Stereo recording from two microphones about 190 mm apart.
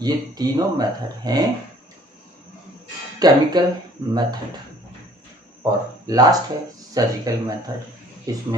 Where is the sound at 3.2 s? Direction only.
20° right (ahead or behind).